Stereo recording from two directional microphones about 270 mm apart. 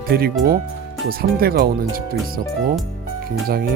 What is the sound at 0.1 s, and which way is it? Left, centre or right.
Speech, right.